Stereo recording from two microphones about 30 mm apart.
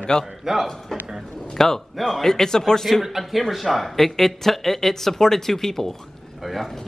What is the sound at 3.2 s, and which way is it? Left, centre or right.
Speech, centre.